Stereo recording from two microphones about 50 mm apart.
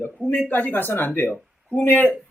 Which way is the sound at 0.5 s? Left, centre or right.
Left.